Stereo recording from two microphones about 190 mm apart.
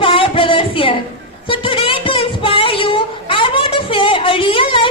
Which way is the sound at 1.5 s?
30° left (ahead or behind).